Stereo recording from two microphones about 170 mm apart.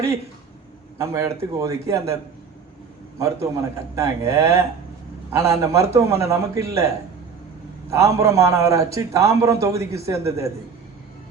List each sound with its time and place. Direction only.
0.9 s a man's voice: 20° right (ahead or behind)
3.2 s a man's voice: 20° right (ahead or behind)
7.9 s a man's voice: 15° right (ahead or behind)